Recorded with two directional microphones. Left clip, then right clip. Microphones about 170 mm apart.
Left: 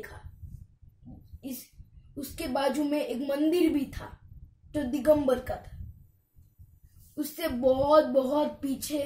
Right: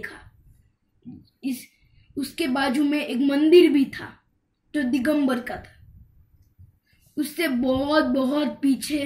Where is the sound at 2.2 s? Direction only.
25° left (ahead or behind).